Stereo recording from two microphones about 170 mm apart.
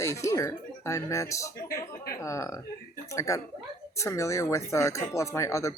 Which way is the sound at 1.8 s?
20° left (ahead or behind).